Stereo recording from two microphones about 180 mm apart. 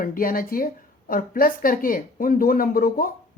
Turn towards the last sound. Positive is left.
turn(degrees=55)  # may be behind; listen again after turning